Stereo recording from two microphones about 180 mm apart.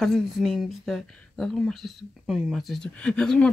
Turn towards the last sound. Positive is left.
turn(degrees=5)  # may be behind; listen again after turning